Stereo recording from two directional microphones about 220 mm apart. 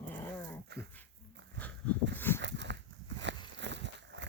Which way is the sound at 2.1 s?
10° left (ahead or behind).